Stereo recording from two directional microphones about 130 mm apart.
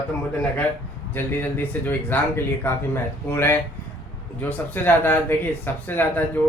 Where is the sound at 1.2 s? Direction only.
15° left (ahead or behind).